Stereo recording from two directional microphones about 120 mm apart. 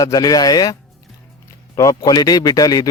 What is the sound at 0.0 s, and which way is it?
A man's voice, 30° left (ahead or behind).